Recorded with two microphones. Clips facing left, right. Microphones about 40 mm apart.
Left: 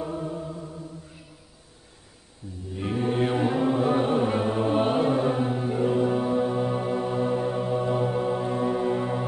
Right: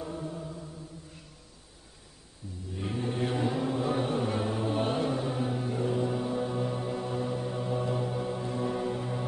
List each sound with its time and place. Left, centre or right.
0.0 s music: left
2.9 s music: left
5.1 s mantra: left
5.4 s music: left